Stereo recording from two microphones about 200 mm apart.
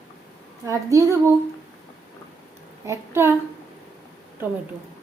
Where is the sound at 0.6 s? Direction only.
15° right (ahead or behind).